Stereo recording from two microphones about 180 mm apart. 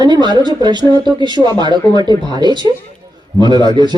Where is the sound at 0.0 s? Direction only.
25° right (ahead or behind).